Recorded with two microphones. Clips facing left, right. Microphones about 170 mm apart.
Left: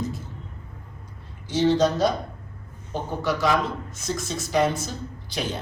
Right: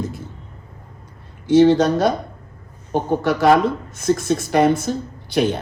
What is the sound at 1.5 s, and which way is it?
Speech, 60° right (ahead or behind).